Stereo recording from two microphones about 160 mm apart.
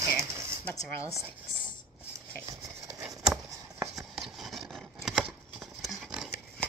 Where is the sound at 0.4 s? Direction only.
15° right (ahead or behind).